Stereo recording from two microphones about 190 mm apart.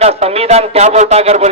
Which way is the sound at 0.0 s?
35° right (ahead or behind).